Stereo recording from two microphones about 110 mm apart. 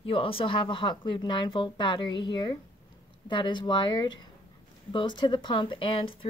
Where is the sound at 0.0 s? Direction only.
55° left (ahead or behind).